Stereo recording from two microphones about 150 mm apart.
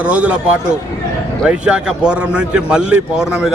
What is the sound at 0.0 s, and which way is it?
Speech, 10° right (ahead or behind).